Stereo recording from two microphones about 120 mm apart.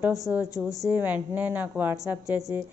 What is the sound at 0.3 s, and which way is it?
A woman's voice, 10° right (ahead or behind).